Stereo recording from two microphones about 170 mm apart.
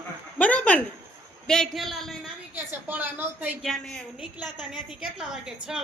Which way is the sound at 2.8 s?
10° right (ahead or behind).